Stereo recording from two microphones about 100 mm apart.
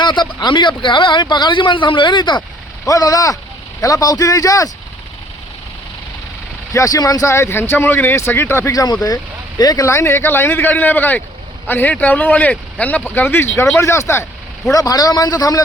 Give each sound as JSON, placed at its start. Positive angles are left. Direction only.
{"t": 0.0, "sound": "a man's voice", "side_deg": 50}
{"t": 2.8, "sound": "a man's voice", "side_deg": 35}
{"t": 6.7, "sound": "speech", "side_deg": 35}
{"t": 8.7, "sound": "a man's voice", "side_deg": 35}
{"t": 9.8, "sound": "speech", "side_deg": 25}
{"t": 14.7, "sound": "a man's voice", "side_deg": 40}